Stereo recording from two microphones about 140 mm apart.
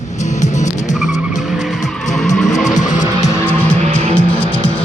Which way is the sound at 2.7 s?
60° left (ahead or behind).